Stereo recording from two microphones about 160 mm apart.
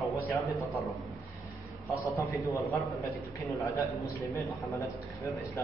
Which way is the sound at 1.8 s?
20° left (ahead or behind).